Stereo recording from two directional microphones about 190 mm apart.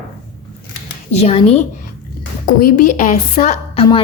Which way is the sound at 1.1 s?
35° left (ahead or behind).